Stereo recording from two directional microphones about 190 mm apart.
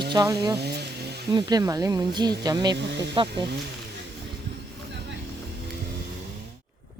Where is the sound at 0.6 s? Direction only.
60° right (ahead or behind).